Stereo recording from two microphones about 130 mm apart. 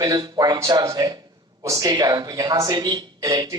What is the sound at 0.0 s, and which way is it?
Speech, 35° right (ahead or behind).